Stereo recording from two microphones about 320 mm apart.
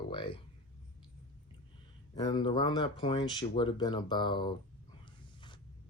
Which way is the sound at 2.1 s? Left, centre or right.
Centre.